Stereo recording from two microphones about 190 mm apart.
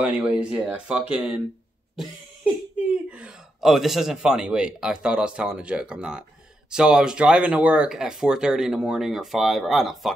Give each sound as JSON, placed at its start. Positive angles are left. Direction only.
{"t": 0.0, "sound": "speech", "side_deg": -5}
{"t": 3.1, "sound": "speech", "side_deg": -5}